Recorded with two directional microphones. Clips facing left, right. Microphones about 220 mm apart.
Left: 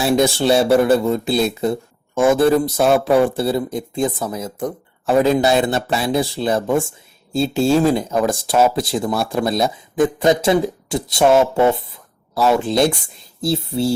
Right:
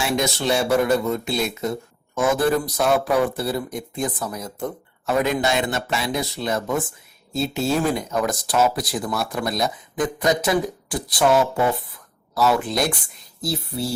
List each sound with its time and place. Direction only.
0.0 s speech: 30° left (ahead or behind)